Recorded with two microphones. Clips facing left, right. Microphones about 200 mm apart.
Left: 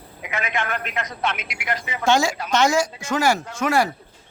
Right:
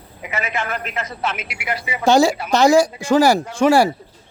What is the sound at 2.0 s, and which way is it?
Speech, 35° right (ahead or behind).